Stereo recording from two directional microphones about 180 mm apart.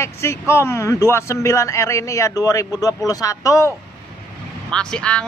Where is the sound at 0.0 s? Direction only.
15° left (ahead or behind).